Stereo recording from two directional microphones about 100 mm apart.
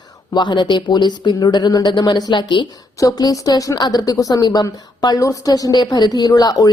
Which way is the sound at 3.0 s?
35° left (ahead or behind).